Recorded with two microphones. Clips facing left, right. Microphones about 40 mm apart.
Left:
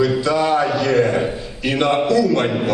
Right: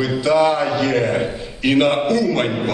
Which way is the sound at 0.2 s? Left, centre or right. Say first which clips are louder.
Right 1 dB; right.